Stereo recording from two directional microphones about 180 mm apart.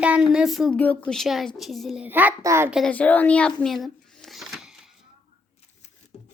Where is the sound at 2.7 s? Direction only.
5° left (ahead or behind).